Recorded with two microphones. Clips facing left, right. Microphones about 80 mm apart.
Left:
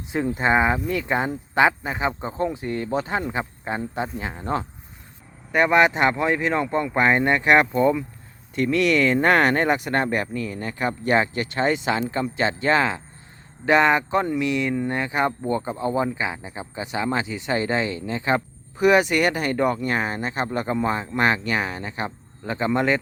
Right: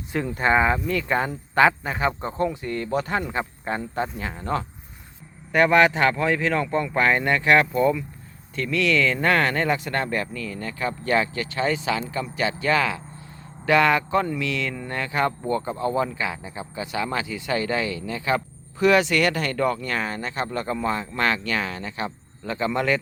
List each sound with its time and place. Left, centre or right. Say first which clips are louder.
0.1 s speech: left 1 dB; centre